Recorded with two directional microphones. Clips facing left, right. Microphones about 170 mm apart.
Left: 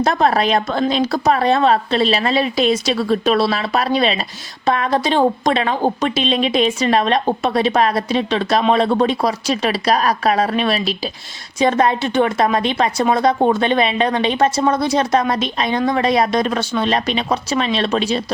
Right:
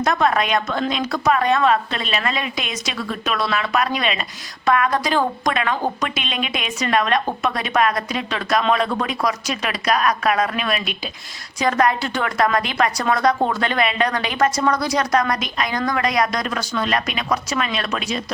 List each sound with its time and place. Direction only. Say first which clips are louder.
0.0 s a woman's voice: left 3 dB; 35° left (ahead or behind)